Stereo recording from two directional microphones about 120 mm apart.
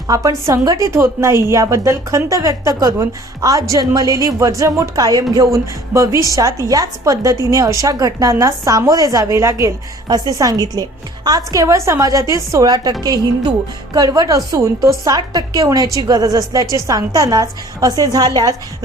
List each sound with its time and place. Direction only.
0.1 s a woman's voice: 30° right (ahead or behind)